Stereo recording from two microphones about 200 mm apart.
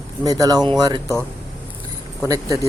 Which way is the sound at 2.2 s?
15° right (ahead or behind).